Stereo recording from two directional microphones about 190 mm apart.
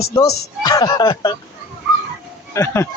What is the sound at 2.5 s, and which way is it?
Speech, 15° left (ahead or behind).